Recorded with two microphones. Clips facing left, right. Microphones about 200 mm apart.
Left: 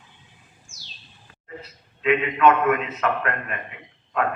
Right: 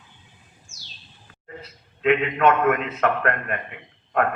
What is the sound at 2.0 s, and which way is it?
Speech, 55° right (ahead or behind).